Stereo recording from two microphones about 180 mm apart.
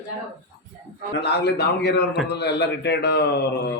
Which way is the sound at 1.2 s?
65° left (ahead or behind).